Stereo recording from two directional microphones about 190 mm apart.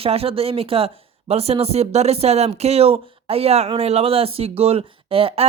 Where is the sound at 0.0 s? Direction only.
30° right (ahead or behind).